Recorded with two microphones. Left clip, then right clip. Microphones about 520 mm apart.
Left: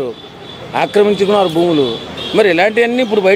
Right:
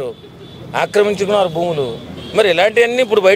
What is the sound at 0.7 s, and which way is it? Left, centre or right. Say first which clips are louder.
Speech: left 3 dB; right.